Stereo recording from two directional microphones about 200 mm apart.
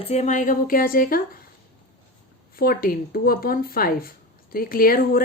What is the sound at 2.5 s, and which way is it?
Speech, 45° left (ahead or behind).